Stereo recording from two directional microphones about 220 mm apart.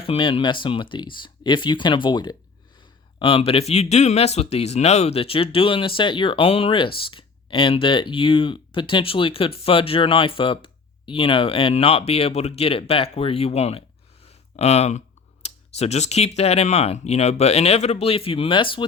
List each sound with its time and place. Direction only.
0.0 s speech: 25° left (ahead or behind)
14.3 s a sound: 30° left (ahead or behind)
15.4 s speech: 30° left (ahead or behind)